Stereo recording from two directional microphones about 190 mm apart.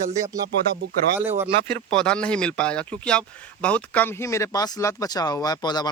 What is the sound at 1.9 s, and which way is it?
Speech, 5° left (ahead or behind).